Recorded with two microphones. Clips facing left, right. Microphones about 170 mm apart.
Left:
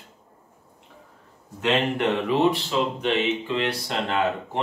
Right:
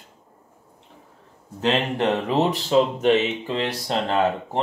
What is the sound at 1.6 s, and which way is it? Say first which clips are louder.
Speech: right 1 dB; 40° right (ahead or behind).